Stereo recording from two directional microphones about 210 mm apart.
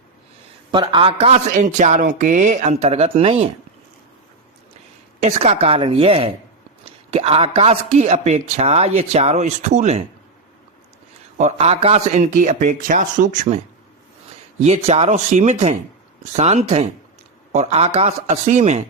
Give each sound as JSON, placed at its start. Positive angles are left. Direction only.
{"t": 0.7, "sound": "speech", "side_deg": -20}
{"t": 5.2, "sound": "a woman's voice", "side_deg": -30}
{"t": 11.3, "sound": "speech", "side_deg": -30}
{"t": 14.6, "sound": "a woman's voice", "side_deg": -30}